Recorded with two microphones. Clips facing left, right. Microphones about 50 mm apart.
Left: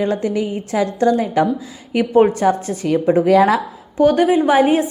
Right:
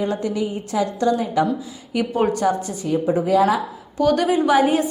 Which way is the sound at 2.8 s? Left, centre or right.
Left.